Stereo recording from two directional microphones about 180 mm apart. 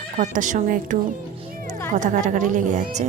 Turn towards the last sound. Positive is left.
turn(degrees=-40)  # may be behind; listen again after turning